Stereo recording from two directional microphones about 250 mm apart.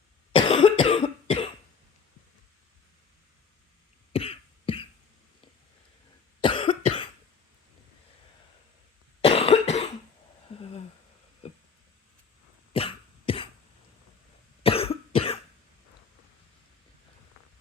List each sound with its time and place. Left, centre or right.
0.3 s cough: centre
4.1 s cough: left
6.4 s cough: left
9.2 s cough: left
10.5 s a sound: left
12.7 s cough: left
14.6 s cough: left